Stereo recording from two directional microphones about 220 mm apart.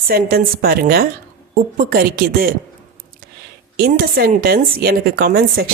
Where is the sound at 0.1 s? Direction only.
45° right (ahead or behind).